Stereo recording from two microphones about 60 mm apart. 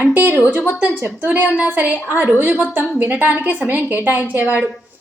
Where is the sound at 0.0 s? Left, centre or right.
Right.